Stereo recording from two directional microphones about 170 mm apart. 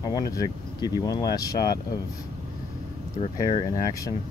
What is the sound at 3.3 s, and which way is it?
Speech, 25° left (ahead or behind).